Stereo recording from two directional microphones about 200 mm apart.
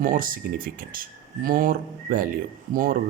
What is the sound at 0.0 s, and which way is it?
Speech, 45° right (ahead or behind).